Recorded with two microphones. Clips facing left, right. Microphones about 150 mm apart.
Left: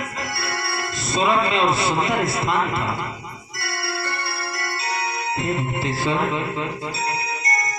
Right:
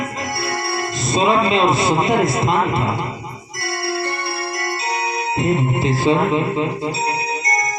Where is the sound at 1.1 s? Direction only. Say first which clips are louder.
Right 4 dB; 20° right (ahead or behind).